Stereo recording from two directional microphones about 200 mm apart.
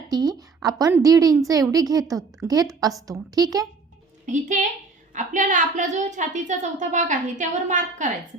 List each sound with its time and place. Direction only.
0.1 s a woman's voice: 20° right (ahead or behind)
4.3 s a woman's voice: 40° right (ahead or behind)